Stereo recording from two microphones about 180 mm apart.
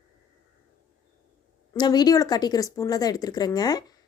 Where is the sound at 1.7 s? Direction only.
25° left (ahead or behind).